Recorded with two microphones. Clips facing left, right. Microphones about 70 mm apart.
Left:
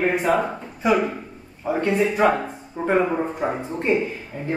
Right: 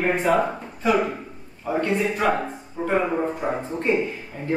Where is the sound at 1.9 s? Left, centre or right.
Centre.